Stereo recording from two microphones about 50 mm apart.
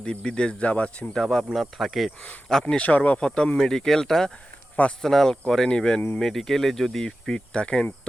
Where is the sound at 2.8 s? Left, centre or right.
Left.